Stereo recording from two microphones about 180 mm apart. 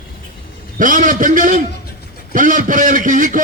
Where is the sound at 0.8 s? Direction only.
50° right (ahead or behind).